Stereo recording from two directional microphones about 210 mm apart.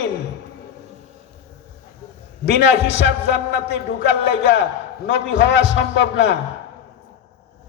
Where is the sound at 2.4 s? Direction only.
55° left (ahead or behind).